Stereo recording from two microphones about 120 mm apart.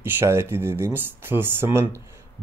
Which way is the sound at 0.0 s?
20° right (ahead or behind).